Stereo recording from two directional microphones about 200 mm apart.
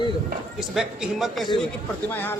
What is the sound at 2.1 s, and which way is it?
Speech, 10° left (ahead or behind).